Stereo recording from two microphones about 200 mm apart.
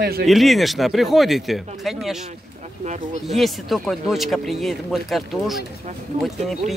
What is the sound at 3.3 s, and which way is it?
Speech, centre (ahead or behind).